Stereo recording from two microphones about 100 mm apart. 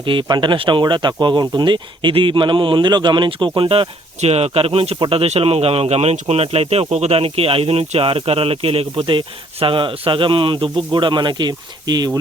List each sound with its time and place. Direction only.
0.0 s speech: 60° right (ahead or behind); by 4.9 s 75° right (ahead or behind)
4.9 s speech: 65° right (ahead or behind); by 12.2 s 45° right (ahead or behind)